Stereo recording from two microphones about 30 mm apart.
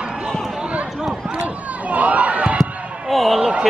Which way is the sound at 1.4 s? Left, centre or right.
Right.